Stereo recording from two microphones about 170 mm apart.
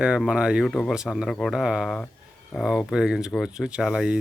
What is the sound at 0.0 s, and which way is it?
Speech, 5° right (ahead or behind).